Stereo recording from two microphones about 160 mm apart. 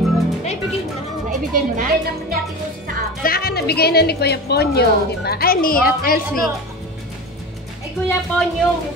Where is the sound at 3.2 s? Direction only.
70° left (ahead or behind).